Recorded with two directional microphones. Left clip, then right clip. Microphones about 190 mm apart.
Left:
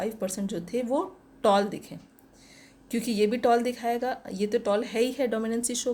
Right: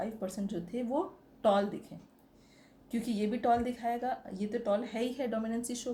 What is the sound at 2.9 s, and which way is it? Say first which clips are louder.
Speech: left 9 dB; 40° left (ahead or behind).